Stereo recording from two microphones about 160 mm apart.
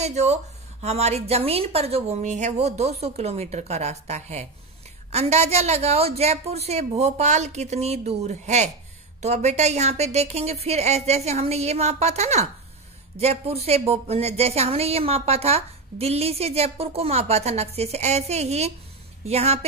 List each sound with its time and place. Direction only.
0.0 s a woman's voice: 45° right (ahead or behind)